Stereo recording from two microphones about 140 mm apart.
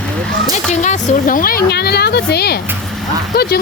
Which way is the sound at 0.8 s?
65° left (ahead or behind).